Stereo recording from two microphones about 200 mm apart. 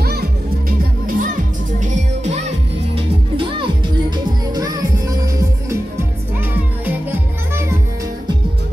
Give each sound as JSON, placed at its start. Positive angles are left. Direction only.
{"t": 0.0, "sound": "music", "side_deg": -50}